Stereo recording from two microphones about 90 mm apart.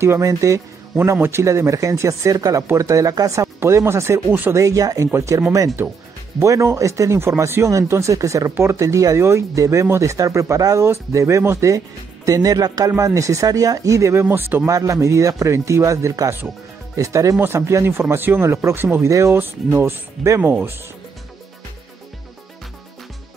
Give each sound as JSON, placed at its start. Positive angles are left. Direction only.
{"t": 0.0, "sound": "speech", "side_deg": -30}
{"t": 4.6, "sound": "speech", "side_deg": -40}
{"t": 6.4, "sound": "speech", "side_deg": -35}